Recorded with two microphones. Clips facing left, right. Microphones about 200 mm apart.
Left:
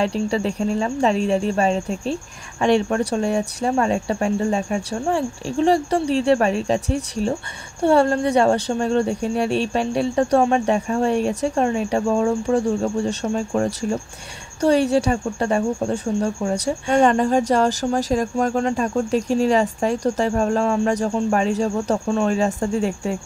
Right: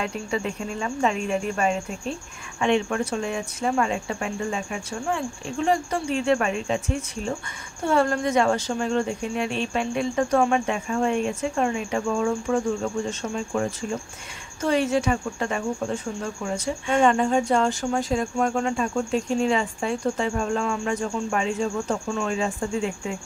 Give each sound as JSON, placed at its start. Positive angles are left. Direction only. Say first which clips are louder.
{"t": 0.0, "sound": "speech", "louder": "left 7 dB", "side_deg": 35}
{"t": 14.6, "sound": "speech", "louder": "left 5 dB", "side_deg": 35}